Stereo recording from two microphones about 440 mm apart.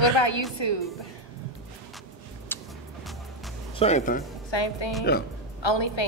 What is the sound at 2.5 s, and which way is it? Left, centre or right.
Music, centre.